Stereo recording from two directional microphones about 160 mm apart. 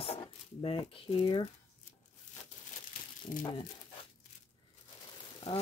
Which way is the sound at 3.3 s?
55° left (ahead or behind).